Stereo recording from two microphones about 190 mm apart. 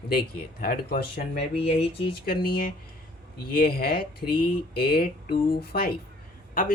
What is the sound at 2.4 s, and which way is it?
Speech, 50° left (ahead or behind).